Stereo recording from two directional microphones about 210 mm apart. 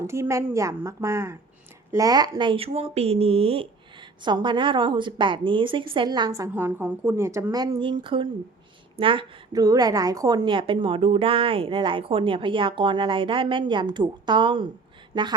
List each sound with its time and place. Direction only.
0.0 s a woman's voice: 15° right (ahead or behind)